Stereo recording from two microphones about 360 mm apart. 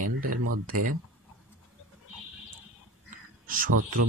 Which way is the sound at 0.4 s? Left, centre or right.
Right.